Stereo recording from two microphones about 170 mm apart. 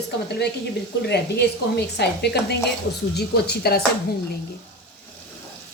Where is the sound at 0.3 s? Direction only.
75° left (ahead or behind).